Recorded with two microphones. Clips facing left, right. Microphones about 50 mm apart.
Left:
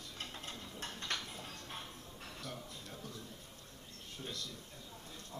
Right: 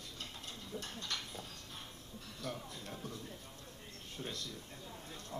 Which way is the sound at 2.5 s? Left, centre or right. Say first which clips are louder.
Right 6 dB; right.